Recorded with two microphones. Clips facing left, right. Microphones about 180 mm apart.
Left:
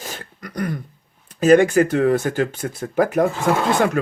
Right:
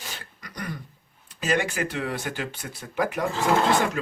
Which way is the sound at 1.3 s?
50° left (ahead or behind).